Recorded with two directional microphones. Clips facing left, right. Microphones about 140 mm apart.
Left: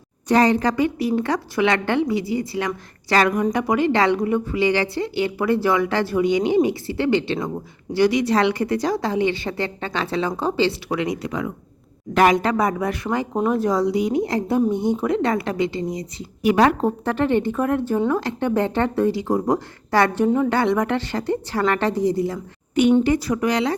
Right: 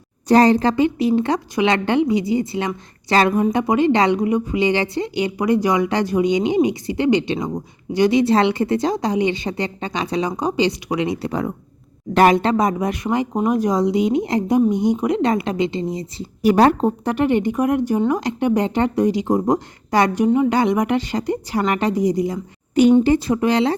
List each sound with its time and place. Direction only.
0.3 s a woman's voice: 35° right (ahead or behind)
16.8 s speech: 15° right (ahead or behind)
22.7 s a woman's voice: 35° right (ahead or behind)